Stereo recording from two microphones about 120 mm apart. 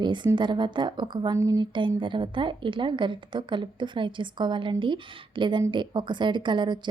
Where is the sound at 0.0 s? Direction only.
40° right (ahead or behind).